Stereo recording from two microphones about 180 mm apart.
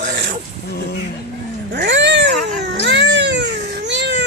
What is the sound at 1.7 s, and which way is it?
Cat, 70° right (ahead or behind).